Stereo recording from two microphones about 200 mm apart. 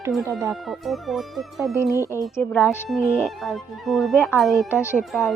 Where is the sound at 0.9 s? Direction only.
Centre (ahead or behind).